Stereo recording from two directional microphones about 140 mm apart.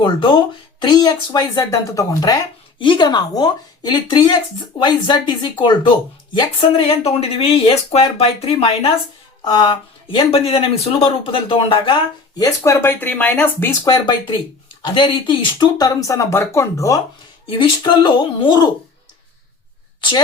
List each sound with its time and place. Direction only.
0.0 s speech: 35° left (ahead or behind)
12.4 s speech: 20° left (ahead or behind)
13.8 s speech: 30° left (ahead or behind)
17.5 s speech: 35° left (ahead or behind)
20.0 s a woman's voice: 35° left (ahead or behind)